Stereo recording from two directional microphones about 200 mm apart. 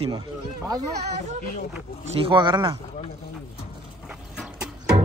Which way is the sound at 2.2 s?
25° right (ahead or behind).